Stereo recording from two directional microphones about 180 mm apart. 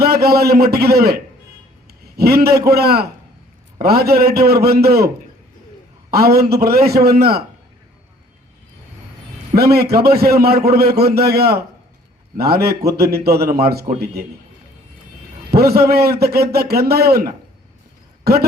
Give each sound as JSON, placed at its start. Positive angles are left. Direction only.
{"t": 0.0, "sound": "a man's voice", "side_deg": -60}
{"t": 9.6, "sound": "a man's voice", "side_deg": -60}
{"t": 15.5, "sound": "a man's voice", "side_deg": -60}